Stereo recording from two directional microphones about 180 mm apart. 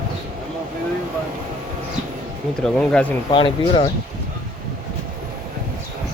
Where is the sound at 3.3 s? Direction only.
25° left (ahead or behind).